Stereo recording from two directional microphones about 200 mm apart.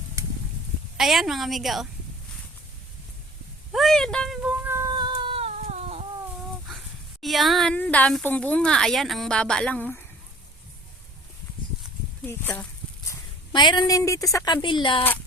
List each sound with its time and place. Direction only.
0.9 s speech: centre (ahead or behind)
3.7 s speech: centre (ahead or behind)
4.6 s a sound: 15° right (ahead or behind); by 6.1 s 30° right (ahead or behind)
6.7 s speech: centre (ahead or behind)
12.2 s speech: 10° left (ahead or behind)
13.1 s a sound: 25° left (ahead or behind)
14.3 s speech: 20° left (ahead or behind)